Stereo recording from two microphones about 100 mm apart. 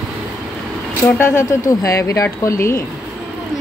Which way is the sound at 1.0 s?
20° left (ahead or behind).